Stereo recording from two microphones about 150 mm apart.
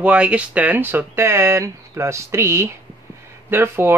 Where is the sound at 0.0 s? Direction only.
10° right (ahead or behind).